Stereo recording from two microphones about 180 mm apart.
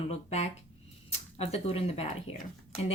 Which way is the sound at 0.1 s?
35° left (ahead or behind).